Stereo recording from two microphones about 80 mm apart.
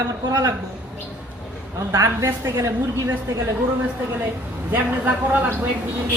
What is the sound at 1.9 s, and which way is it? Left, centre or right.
Speech, right.